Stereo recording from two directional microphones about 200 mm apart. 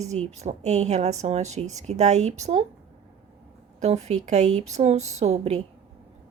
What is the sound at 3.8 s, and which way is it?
A woman's voice, 35° right (ahead or behind).